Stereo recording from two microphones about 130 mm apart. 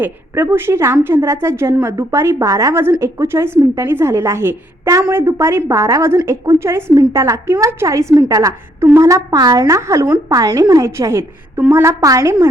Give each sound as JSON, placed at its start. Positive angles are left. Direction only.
{"t": 0.0, "sound": "a woman's voice", "side_deg": -15}